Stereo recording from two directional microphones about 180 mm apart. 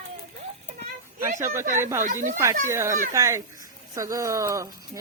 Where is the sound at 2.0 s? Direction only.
45° right (ahead or behind).